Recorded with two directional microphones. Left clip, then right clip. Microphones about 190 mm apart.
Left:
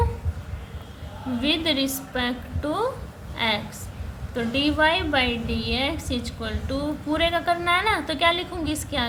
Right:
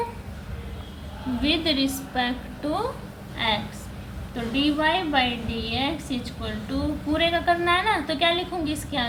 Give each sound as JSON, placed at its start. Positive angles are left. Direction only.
{"t": 1.4, "sound": "a woman's voice", "side_deg": 30}